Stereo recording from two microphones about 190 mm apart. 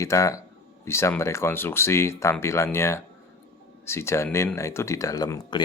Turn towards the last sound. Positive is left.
turn(degrees=20)  # may be behind; listen again after turning